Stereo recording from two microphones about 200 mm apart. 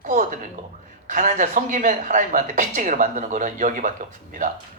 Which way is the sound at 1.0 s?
40° right (ahead or behind).